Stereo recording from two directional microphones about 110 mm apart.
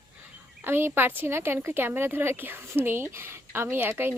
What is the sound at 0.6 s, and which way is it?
A woman's voice, 20° right (ahead or behind).